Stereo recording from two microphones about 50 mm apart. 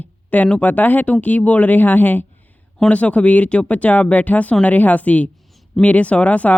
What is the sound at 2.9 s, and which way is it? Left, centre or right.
Speech, left.